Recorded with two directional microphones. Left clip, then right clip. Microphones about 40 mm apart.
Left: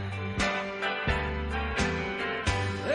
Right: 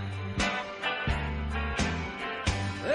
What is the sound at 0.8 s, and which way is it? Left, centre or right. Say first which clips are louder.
Music: left 1 dB; left.